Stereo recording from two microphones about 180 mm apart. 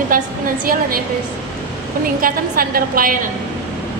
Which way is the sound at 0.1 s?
50° right (ahead or behind).